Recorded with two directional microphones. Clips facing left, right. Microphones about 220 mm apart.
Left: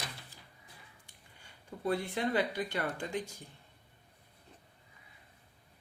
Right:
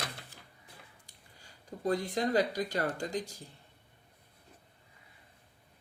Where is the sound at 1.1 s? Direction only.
35° right (ahead or behind).